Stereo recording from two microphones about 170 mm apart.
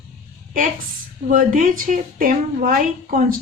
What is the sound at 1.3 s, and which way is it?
A woman's voice, 50° right (ahead or behind).